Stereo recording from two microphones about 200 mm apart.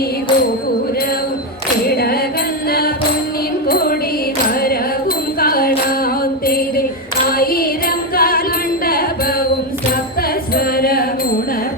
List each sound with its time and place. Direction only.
1.9 s music: 50° left (ahead or behind)
6.4 s a sound: 50° left (ahead or behind)
7.3 s music: 45° left (ahead or behind)